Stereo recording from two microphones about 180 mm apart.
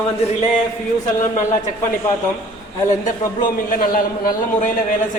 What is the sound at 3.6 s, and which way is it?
A man's voice, 50° left (ahead or behind).